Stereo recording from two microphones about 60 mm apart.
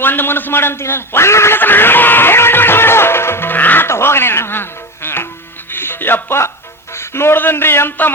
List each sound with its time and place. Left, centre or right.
0.0 s a man's voice: left
1.5 s music: left
3.8 s music: left
6.9 s a man's voice: left